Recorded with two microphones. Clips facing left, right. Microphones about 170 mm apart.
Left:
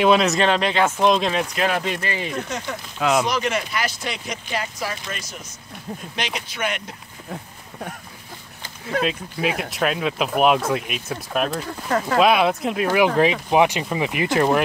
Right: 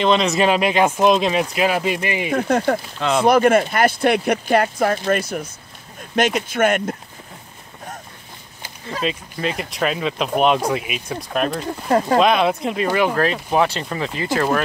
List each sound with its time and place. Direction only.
0.0 s speech: 5° left (ahead or behind)
0.4 s speech: 10° right (ahead or behind)
2.3 s speech: 55° right (ahead or behind)
8.9 s speech: 60° left (ahead or behind)
9.4 s speech: 5° left (ahead or behind)
11.6 s speech: 30° right (ahead or behind)
12.2 s speech: 5° left (ahead or behind); by 14.6 s 20° left (ahead or behind)